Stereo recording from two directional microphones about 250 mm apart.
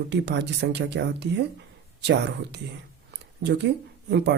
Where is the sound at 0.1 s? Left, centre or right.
Right.